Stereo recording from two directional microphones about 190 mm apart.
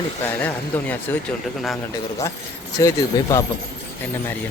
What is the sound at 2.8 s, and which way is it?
Speech, 15° left (ahead or behind).